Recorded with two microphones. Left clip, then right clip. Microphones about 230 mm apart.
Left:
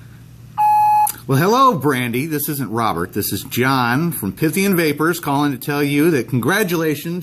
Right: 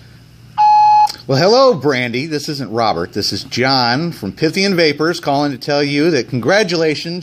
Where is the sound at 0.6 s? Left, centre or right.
Centre.